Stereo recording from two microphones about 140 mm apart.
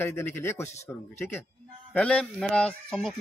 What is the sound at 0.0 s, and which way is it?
Speech, 15° left (ahead or behind).